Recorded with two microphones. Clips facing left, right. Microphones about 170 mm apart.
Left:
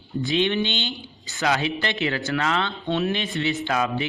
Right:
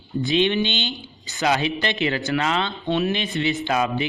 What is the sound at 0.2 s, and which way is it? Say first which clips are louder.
Speech: right 2 dB; 20° right (ahead or behind).